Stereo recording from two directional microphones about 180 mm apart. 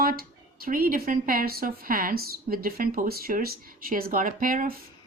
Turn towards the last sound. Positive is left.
turn(degrees=-50)  # may be behind; listen again after turning